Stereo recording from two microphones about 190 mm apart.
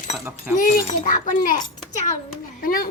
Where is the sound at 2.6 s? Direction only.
50° left (ahead or behind).